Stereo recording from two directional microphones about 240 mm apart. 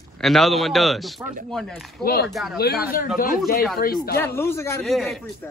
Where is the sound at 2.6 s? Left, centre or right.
Left.